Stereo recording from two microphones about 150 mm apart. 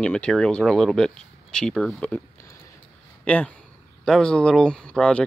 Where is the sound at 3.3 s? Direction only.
10° left (ahead or behind).